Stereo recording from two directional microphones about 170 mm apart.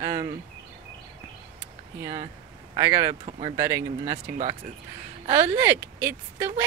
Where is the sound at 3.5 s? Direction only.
15° right (ahead or behind).